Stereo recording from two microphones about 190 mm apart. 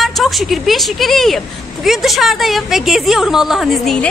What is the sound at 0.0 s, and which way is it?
A woman's voice, centre (ahead or behind).